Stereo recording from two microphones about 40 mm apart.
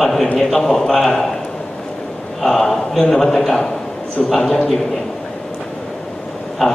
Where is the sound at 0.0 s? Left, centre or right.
Centre.